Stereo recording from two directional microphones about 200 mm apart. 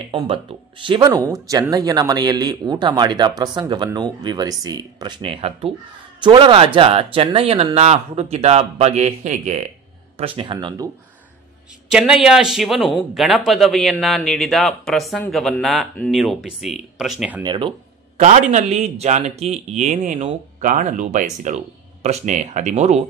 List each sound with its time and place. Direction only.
0.1 s speech: 25° right (ahead or behind)
11.9 s speech: 5° right (ahead or behind)
17.4 s speech: 25° right (ahead or behind)
18.2 s speech: 40° right (ahead or behind)